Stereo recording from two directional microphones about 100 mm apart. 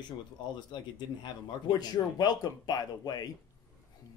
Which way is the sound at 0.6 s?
50° left (ahead or behind).